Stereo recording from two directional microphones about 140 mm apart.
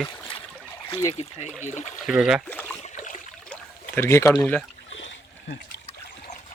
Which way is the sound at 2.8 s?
60° left (ahead or behind).